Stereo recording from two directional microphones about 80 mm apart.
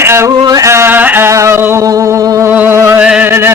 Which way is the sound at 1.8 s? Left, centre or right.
Right.